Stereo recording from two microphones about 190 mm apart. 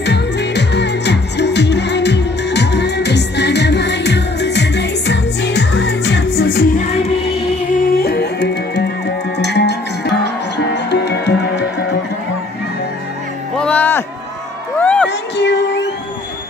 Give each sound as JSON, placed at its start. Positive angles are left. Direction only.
{"t": 0.0, "sound": "music", "side_deg": 65}
{"t": 6.8, "sound": "music", "side_deg": 35}
{"t": 7.7, "sound": "music", "side_deg": 50}
{"t": 13.6, "sound": "music", "side_deg": 5}
{"t": 14.8, "sound": "a sound", "side_deg": 5}
{"t": 15.0, "sound": "music", "side_deg": 65}